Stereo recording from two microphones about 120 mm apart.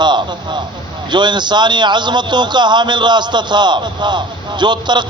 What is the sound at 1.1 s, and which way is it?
A man's voice, 40° right (ahead or behind).